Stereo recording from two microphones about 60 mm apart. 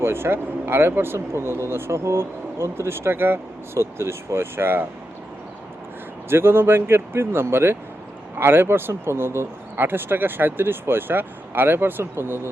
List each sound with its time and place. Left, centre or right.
0.0 s speech: right
6.2 s speech: right